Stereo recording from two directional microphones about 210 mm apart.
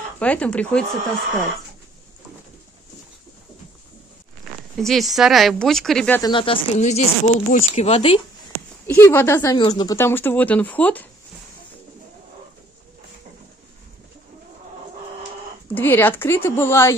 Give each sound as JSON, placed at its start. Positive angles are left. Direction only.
{"t": 0.2, "sound": "speech", "side_deg": 5}
{"t": 4.7, "sound": "speech", "side_deg": 0}
{"t": 6.2, "sound": "speech", "side_deg": 25}
{"t": 8.8, "sound": "speech", "side_deg": 10}
{"t": 9.9, "sound": "speech", "side_deg": 10}
{"t": 15.7, "sound": "speech", "side_deg": 10}